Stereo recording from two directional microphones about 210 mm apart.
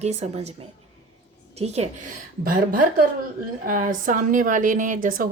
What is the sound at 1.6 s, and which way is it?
Speech, 30° right (ahead or behind).